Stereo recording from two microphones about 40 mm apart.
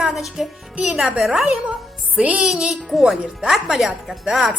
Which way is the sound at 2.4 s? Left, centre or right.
Centre.